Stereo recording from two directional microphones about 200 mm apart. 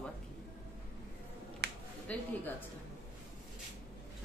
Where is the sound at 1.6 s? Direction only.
55° right (ahead or behind).